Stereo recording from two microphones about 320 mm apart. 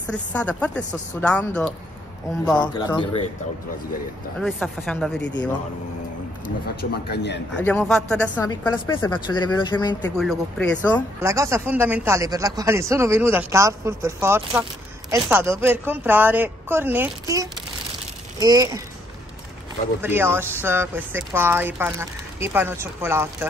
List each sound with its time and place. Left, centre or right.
0.0 s speech: centre
4.4 s speech: centre
6.4 s a man's voice: left
7.5 s speech: centre
10.1 s speech: centre
11.2 s speech: centre
20.0 s speech: centre